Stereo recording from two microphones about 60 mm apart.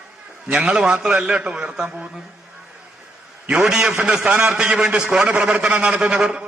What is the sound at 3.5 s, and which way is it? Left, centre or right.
A man's voice, centre.